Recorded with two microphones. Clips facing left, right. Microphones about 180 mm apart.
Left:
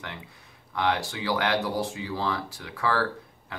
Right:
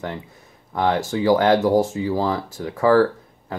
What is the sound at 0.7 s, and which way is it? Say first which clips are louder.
Speech: right 7 dB; 45° right (ahead or behind).